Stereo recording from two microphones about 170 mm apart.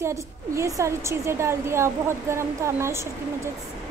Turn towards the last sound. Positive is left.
turn(degrees=-15)  # may be behind; listen again after turning